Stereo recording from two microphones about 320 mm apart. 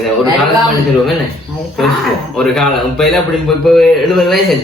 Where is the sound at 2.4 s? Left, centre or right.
Centre.